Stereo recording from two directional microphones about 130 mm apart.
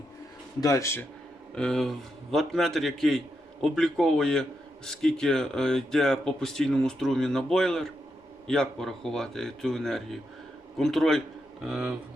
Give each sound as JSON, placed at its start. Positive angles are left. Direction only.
{"t": 0.6, "sound": "speech", "side_deg": 25}
{"t": 1.5, "sound": "speech", "side_deg": 5}